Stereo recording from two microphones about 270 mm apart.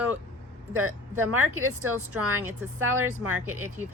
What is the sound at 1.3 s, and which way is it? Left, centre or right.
Speech, right.